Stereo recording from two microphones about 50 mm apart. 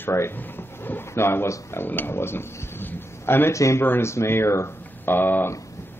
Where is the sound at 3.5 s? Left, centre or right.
Left.